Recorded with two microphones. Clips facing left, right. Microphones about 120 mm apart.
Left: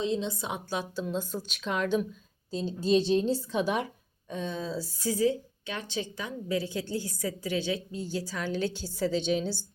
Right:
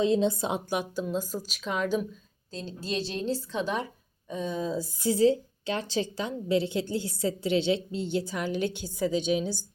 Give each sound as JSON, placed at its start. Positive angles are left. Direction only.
{"t": 0.2, "sound": "a woman's voice", "side_deg": -45}
{"t": 0.7, "sound": "a woman's voice", "side_deg": -15}
{"t": 2.5, "sound": "a woman's voice", "side_deg": 15}
{"t": 4.3, "sound": "a woman's voice", "side_deg": -10}